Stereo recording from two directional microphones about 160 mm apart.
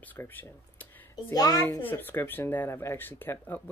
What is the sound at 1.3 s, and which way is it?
Speech, 25° left (ahead or behind).